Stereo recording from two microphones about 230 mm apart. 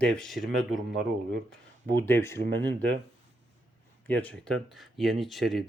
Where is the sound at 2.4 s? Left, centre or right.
Right.